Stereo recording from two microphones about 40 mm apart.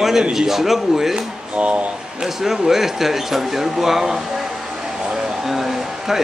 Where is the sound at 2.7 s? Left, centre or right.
Centre.